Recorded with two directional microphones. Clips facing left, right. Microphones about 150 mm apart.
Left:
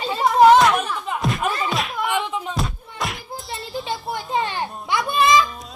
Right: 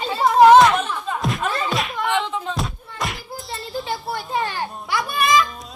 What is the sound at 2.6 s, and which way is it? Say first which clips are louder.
Music: even; centre (ahead or behind).